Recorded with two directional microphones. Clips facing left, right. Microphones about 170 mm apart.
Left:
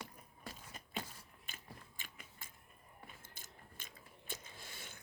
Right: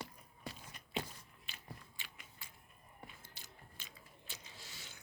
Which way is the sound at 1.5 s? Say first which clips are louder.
Right 1 dB; 45° left (ahead or behind).